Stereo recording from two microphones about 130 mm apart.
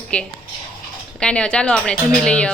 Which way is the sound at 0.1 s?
10° left (ahead or behind).